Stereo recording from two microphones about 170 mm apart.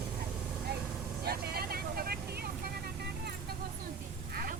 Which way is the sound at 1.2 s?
65° right (ahead or behind).